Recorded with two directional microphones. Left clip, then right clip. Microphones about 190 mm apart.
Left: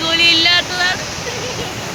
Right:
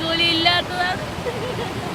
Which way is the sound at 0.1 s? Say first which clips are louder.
Left 6 dB; 10° right (ahead or behind).